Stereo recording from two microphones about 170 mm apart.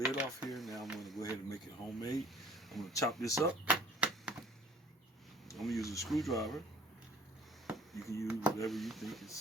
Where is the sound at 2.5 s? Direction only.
Centre (ahead or behind).